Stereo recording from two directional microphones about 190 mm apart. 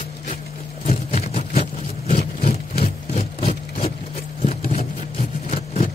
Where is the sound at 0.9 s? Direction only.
35° left (ahead or behind).